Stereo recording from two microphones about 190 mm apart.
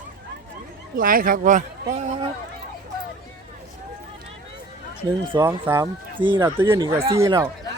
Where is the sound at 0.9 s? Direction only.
50° right (ahead or behind).